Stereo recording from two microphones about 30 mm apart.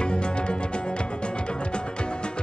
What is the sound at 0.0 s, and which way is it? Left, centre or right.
Music, left.